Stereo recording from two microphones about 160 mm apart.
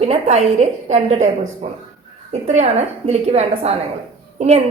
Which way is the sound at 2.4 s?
45° right (ahead or behind).